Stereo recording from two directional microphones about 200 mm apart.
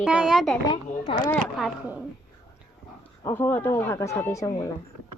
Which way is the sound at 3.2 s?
10° left (ahead or behind).